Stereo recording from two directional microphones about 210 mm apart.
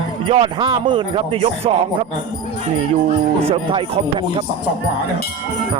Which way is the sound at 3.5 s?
25° right (ahead or behind).